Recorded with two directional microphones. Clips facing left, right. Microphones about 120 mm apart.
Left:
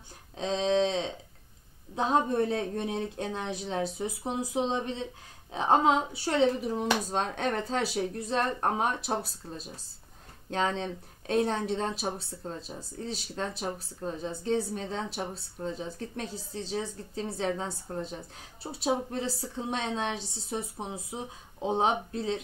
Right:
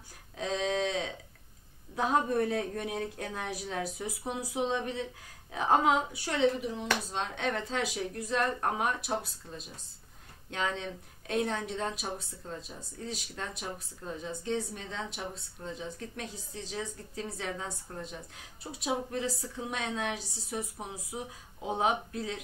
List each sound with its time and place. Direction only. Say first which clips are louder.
0.4 s a sound: left 5 dB; 25° left (ahead or behind)
2.0 s speech: left 2 dB; 25° left (ahead or behind)
10.5 s speech: left 4 dB; 35° left (ahead or behind)